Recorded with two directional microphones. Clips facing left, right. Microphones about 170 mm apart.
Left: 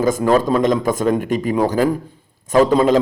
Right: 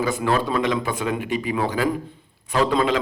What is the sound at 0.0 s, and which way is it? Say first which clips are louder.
A man's voice: left 7 dB; 45° left (ahead or behind).